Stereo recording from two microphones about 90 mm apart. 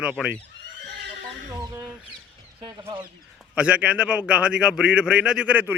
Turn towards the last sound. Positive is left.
turn(degrees=-15)  # may be behind; listen again after turning